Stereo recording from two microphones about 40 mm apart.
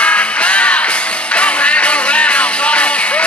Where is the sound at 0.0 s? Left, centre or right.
Left.